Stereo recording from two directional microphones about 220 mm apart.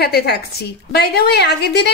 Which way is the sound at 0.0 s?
45° left (ahead or behind).